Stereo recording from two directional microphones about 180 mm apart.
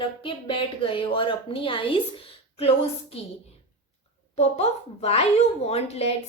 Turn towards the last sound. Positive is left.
turn(degrees=35)  # may be behind; listen again after turning